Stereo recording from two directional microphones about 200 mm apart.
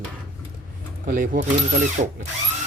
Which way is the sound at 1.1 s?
45° right (ahead or behind).